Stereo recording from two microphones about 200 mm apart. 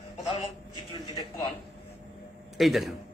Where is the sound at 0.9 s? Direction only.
20° left (ahead or behind).